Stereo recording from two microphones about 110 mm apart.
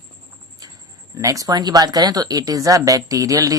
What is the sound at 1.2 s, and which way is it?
Speech, 30° right (ahead or behind).